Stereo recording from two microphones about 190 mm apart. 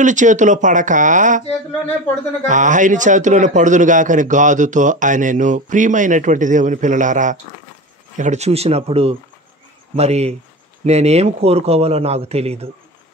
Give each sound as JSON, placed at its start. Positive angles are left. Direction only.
{"t": 0.0, "sound": "a man's voice", "side_deg": -40}
{"t": 2.4, "sound": "a man's voice", "side_deg": -40}